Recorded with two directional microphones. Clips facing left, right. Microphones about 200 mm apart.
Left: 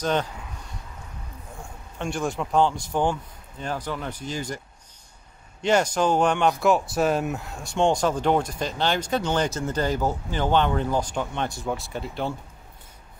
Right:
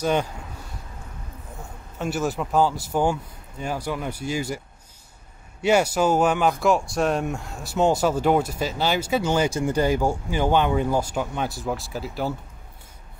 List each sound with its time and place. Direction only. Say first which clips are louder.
0.0 s speech: right 2 dB; 10° right (ahead or behind)
2.0 s speech: right 2 dB; 5° right (ahead or behind)
5.6 s speech: right 2 dB; 10° right (ahead or behind)